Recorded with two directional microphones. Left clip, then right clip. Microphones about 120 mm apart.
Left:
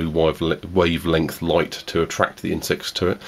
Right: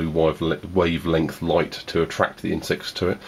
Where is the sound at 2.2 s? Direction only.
25° left (ahead or behind).